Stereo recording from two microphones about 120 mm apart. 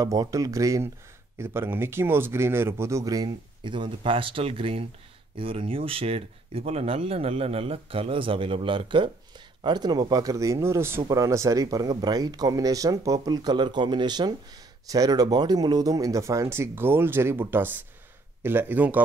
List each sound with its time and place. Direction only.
0.0 s speech: 30° right (ahead or behind)